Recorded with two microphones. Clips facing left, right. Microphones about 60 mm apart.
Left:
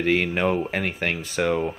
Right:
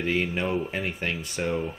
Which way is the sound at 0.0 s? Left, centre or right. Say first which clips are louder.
Left 5 dB; left.